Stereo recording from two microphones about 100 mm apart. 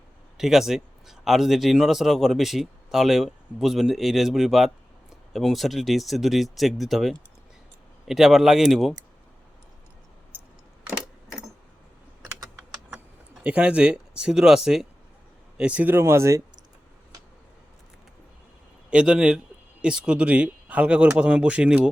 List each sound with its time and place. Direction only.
0.3 s speech: 5° right (ahead or behind)
12.9 s speech: 10° right (ahead or behind); by 16.4 s 30° right (ahead or behind)
18.9 s speech: 10° right (ahead or behind)